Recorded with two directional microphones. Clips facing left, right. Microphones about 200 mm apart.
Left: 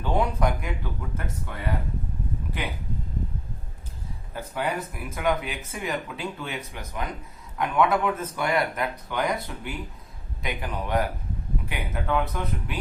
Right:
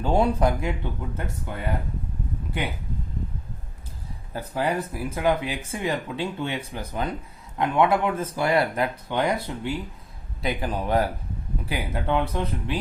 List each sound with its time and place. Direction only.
0.0 s speech: 30° right (ahead or behind)
4.4 s speech: 35° right (ahead or behind)